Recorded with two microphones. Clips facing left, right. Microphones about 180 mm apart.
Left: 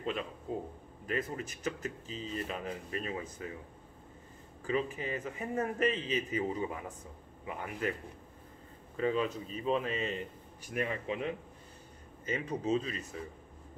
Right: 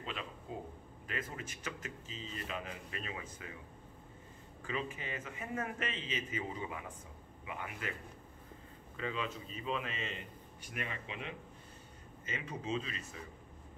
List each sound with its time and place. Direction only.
0.0 s speech: 45° left (ahead or behind)
4.6 s speech: 40° left (ahead or behind)
8.9 s speech: 40° left (ahead or behind)